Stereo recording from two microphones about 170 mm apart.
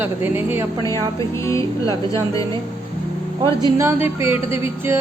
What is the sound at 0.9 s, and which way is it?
Speech, 20° left (ahead or behind).